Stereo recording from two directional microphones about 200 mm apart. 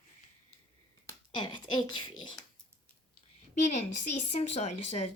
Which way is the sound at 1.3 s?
25° left (ahead or behind).